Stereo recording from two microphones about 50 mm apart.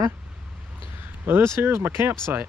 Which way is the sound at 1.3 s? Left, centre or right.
Right.